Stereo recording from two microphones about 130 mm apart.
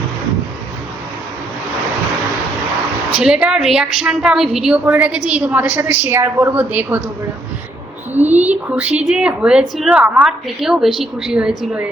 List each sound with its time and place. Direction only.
3.2 s a woman's voice: 5° right (ahead or behind)
8.1 s a woman's voice: 15° right (ahead or behind)